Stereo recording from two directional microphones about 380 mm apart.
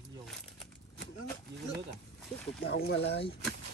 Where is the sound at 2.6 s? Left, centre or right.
Left.